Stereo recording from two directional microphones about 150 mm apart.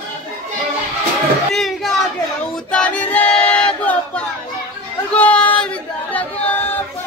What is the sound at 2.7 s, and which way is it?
Battle cry, 10° left (ahead or behind).